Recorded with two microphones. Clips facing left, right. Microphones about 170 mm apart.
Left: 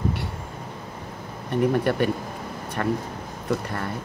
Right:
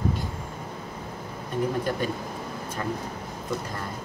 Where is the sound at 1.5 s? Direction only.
70° left (ahead or behind).